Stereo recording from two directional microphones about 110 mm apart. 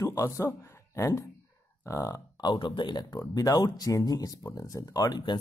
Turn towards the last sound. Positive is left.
turn(degrees=40)  # may be behind; listen again after turning